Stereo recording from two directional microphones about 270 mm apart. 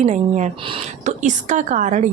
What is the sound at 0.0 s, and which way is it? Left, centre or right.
A woman's voice, right.